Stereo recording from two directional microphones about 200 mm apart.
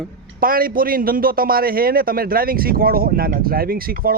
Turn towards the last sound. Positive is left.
turn(degrees=-45)  # may be behind; listen again after turning